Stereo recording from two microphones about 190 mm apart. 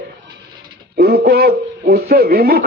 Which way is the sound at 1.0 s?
55° right (ahead or behind).